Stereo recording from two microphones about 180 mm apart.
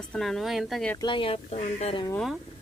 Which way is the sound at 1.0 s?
30° left (ahead or behind).